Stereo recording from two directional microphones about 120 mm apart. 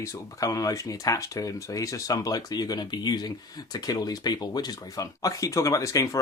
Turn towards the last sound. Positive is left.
turn(degrees=25)  # may be behind; listen again after turning